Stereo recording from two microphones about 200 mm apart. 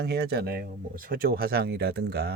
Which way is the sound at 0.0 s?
55° right (ahead or behind).